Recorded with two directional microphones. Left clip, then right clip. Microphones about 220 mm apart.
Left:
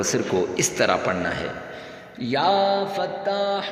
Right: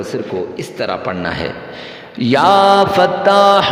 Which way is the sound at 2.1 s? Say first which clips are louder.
Right 10 dB; 40° right (ahead or behind).